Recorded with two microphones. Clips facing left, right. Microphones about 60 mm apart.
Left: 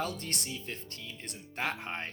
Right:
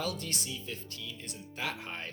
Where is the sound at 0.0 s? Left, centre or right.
Left.